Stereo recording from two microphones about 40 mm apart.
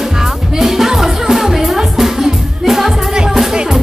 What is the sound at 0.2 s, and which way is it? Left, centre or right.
Music, centre.